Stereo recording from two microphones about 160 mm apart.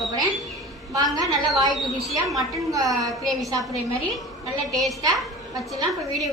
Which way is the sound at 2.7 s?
20° right (ahead or behind).